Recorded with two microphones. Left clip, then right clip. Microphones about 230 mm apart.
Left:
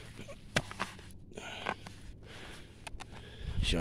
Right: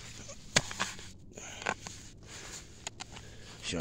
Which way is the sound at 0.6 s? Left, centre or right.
Right.